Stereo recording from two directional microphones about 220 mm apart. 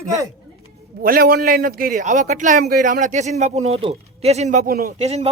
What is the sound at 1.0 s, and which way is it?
A man's voice, 40° right (ahead or behind).